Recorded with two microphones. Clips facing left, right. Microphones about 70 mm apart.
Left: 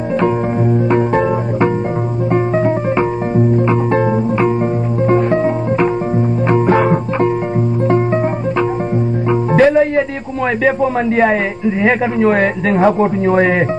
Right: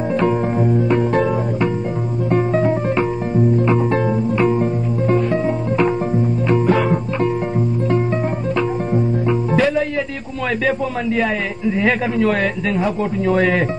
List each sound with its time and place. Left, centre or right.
3.6 s music: left
9.3 s music: left
10.6 s a man's voice: left
11.9 s a man's voice: left
13.2 s speech: left